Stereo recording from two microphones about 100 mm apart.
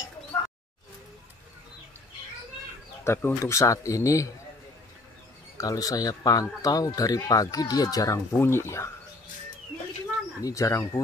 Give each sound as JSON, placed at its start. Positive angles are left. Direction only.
{"t": 3.0, "sound": "speech", "side_deg": 20}
{"t": 3.5, "sound": "speech", "side_deg": 30}
{"t": 5.6, "sound": "speech", "side_deg": 35}
{"t": 10.4, "sound": "speech", "side_deg": 30}